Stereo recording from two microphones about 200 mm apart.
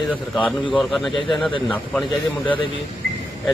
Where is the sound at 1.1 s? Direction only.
25° left (ahead or behind).